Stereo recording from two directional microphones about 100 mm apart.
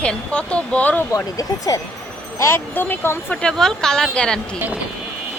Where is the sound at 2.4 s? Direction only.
25° left (ahead or behind).